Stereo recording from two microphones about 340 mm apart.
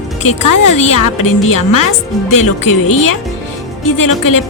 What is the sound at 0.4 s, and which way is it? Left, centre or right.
A woman's voice, left.